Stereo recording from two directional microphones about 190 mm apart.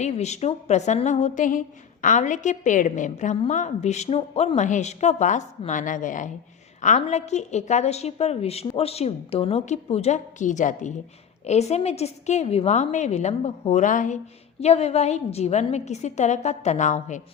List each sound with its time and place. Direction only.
0.0 s a woman's voice: 35° left (ahead or behind)